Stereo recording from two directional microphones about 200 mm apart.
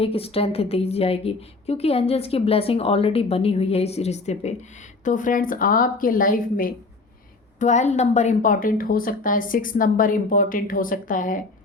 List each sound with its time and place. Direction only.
0.0 s a woman's voice: 30° left (ahead or behind)